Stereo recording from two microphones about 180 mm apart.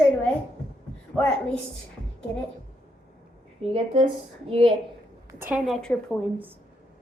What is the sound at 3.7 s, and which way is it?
A woman's voice, 30° right (ahead or behind).